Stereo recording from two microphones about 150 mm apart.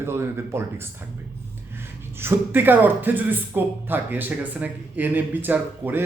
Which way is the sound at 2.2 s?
15° right (ahead or behind).